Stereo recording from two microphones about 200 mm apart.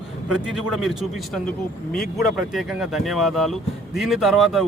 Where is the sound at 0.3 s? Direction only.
Centre (ahead or behind).